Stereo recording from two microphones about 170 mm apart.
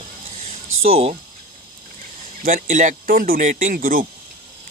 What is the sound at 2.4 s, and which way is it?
Speech, 50° right (ahead or behind).